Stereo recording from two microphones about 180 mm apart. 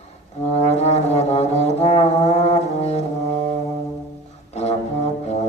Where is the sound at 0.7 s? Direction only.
35° left (ahead or behind).